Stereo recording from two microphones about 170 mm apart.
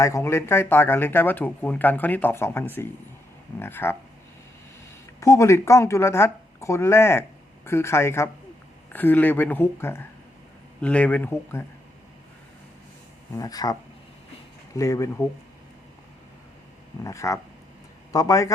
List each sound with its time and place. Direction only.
0.0 s speech: 15° left (ahead or behind)
5.2 s speech: 20° left (ahead or behind)
13.3 s speech: 20° left (ahead or behind)
14.8 s speech: 20° left (ahead or behind)
17.0 s speech: 20° left (ahead or behind)